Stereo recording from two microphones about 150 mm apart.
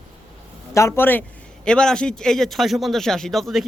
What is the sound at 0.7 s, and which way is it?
Speech, 20° left (ahead or behind).